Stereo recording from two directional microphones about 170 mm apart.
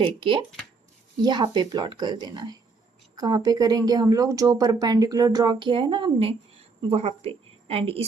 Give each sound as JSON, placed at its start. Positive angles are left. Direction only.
{"t": 0.0, "sound": "a woman's voice", "side_deg": -30}